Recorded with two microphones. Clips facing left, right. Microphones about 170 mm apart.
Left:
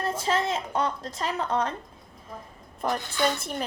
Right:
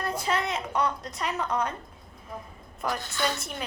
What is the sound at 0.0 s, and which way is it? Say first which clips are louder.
A woman's voice: left 2 dB; 25° left (ahead or behind).